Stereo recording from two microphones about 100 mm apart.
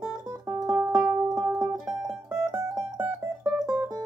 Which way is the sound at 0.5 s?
35° right (ahead or behind).